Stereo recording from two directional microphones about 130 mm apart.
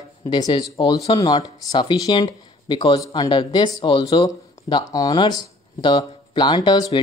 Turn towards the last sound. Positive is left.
turn(degrees=35)  # may be behind; listen again after turning